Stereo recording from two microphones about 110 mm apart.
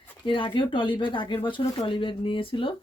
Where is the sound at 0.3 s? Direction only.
50° left (ahead or behind).